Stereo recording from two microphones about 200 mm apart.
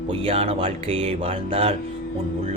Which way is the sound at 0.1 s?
25° right (ahead or behind).